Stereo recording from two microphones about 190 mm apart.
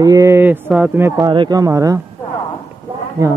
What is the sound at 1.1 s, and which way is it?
Speech, 25° right (ahead or behind).